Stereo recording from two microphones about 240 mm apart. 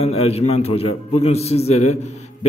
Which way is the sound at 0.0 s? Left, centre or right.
Left.